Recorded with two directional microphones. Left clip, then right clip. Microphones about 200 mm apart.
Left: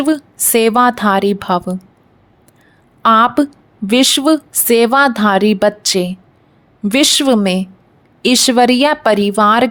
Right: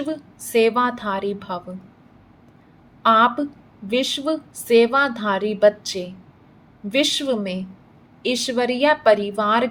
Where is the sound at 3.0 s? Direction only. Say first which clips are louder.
Left 6 dB; 55° left (ahead or behind).